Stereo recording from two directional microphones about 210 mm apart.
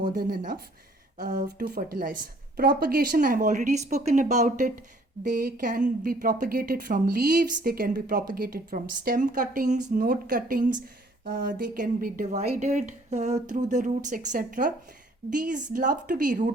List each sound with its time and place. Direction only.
1.2 s a woman's voice: 40° right (ahead or behind)